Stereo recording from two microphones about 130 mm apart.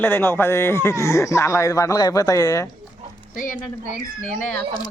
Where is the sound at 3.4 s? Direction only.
85° left.